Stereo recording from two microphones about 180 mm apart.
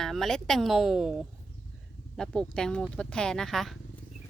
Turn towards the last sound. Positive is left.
turn(degrees=0)  # may be behind; listen again after turning